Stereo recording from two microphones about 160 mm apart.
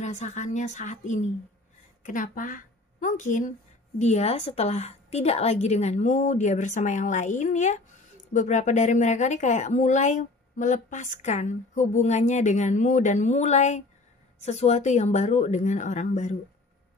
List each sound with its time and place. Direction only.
0.0 s a woman's voice: 45° left (ahead or behind)
4.0 s speech: 40° left (ahead or behind)